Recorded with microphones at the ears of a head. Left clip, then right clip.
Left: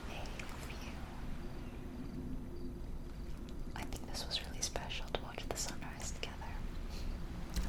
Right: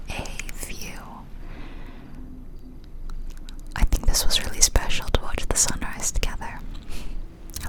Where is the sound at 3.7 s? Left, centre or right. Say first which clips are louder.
Right 18 dB; right.